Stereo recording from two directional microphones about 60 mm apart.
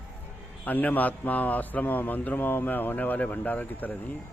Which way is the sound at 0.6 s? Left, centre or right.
Left.